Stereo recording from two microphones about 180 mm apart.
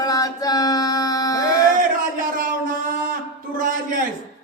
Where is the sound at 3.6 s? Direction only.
50° right (ahead or behind).